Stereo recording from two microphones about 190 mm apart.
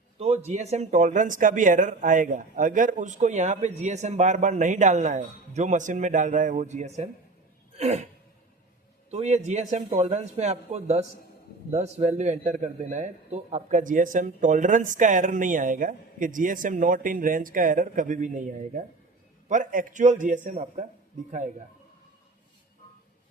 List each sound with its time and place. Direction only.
0.2 s speech: 35° right (ahead or behind)
7.8 s a sound: 35° right (ahead or behind)
9.0 s a man's voice: 35° right (ahead or behind)